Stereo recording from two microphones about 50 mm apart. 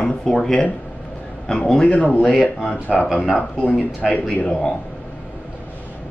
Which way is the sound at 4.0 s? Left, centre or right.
Left.